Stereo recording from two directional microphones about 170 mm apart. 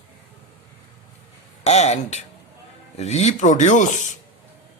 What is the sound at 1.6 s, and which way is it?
Speech, 40° left (ahead or behind).